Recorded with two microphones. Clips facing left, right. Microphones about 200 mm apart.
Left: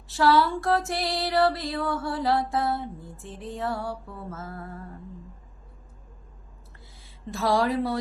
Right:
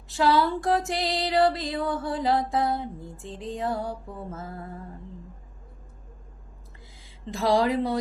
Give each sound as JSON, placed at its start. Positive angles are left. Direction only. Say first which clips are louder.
{"t": 0.1, "sound": "music", "louder": "left 1 dB", "side_deg": -20}
{"t": 7.3, "sound": "music", "louder": "right 1 dB", "side_deg": -15}